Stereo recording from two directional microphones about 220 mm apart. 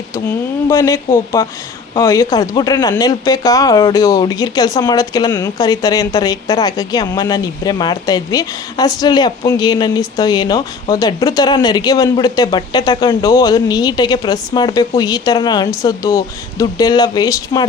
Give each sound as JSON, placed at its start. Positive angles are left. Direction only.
{"t": 0.3, "sound": "speech", "side_deg": 15}